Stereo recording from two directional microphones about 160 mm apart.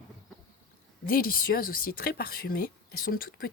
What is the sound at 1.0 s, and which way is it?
A woman's voice, 65° left (ahead or behind).